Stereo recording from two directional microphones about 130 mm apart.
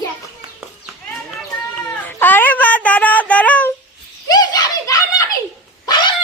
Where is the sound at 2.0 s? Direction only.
15° left (ahead or behind).